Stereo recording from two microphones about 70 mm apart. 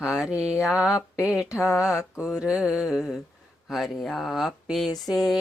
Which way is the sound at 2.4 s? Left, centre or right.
Centre.